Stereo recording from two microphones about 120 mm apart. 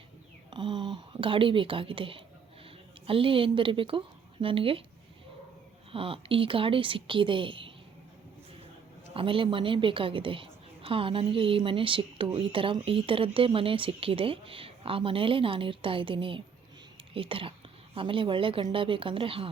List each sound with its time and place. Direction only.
0.5 s a woman's voice: 40° right (ahead or behind)
5.9 s a woman's voice: 50° right (ahead or behind)
9.1 s a woman's voice: 45° right (ahead or behind)